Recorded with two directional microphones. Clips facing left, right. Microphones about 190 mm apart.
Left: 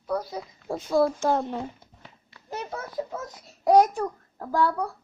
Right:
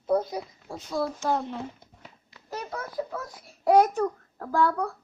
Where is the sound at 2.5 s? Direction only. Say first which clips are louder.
Left 1 dB; 25° left (ahead or behind).